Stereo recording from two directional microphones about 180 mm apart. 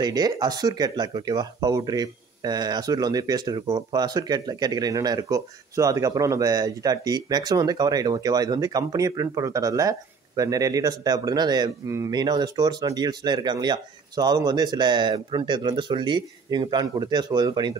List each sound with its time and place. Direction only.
0.0 s speech: 20° right (ahead or behind)